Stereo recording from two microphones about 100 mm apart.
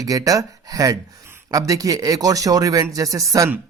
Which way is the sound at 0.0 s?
35° right (ahead or behind).